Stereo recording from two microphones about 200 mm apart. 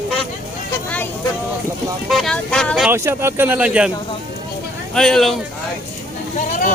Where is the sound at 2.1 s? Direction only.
Centre (ahead or behind).